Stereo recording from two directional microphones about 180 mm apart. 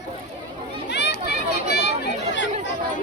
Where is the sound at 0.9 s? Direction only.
70° left (ahead or behind).